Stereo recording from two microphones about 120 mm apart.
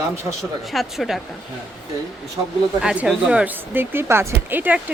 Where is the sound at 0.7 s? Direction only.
Centre (ahead or behind).